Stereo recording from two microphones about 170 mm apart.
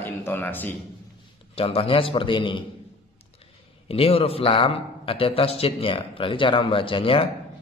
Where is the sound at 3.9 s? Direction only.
35° left (ahead or behind).